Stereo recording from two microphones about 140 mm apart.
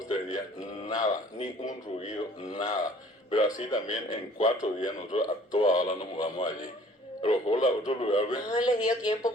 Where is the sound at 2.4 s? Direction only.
25° left (ahead or behind).